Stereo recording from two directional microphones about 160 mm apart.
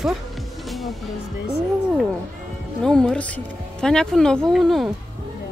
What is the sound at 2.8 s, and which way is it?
Speech, 5° left (ahead or behind).